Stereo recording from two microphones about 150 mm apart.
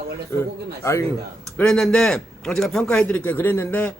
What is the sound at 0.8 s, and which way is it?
Speech, 20° left (ahead or behind).